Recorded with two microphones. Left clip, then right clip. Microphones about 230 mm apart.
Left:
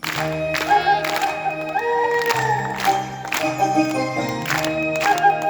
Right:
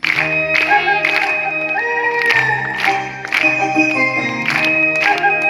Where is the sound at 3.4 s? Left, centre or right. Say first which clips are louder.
Right 4 dB; left.